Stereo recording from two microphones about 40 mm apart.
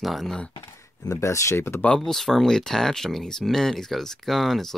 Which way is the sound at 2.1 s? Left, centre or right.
Centre.